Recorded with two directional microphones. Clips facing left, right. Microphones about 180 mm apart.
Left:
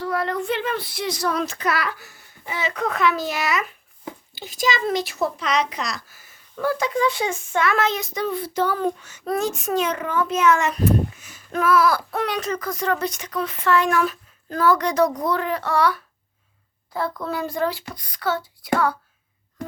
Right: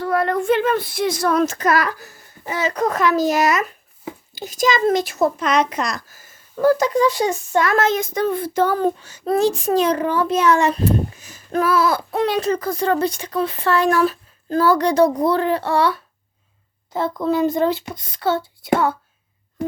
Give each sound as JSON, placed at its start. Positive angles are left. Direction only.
{"t": 0.0, "sound": "a child's voice", "side_deg": -50}